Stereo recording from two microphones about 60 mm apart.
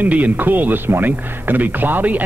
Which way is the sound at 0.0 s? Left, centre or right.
Right.